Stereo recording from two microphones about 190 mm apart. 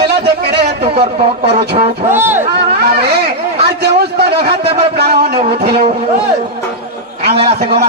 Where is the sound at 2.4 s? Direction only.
55° right (ahead or behind).